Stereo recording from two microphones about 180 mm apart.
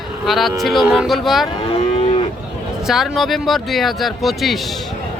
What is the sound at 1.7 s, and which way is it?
Moo, 35° left (ahead or behind).